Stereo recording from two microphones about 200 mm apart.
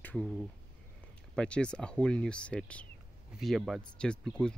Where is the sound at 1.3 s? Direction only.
5° left (ahead or behind).